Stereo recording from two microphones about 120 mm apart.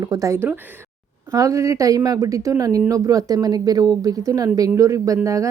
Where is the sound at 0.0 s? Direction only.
30° right (ahead or behind).